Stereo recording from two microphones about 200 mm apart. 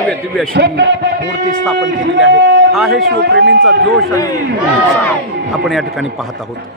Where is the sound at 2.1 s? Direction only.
60° right (ahead or behind).